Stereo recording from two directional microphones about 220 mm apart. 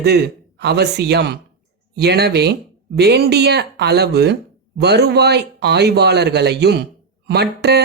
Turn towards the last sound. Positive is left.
turn(degrees=-50)  # may be behind; listen again after turning